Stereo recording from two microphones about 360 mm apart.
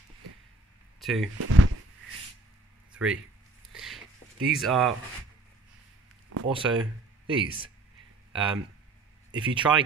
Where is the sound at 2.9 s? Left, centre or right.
Centre.